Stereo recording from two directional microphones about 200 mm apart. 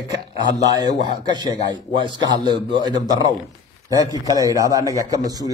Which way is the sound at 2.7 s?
20° right (ahead or behind).